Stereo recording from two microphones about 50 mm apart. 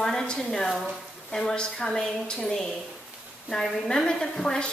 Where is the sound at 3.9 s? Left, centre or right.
Centre.